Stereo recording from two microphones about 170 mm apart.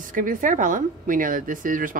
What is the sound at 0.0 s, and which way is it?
Speech, 50° right (ahead or behind).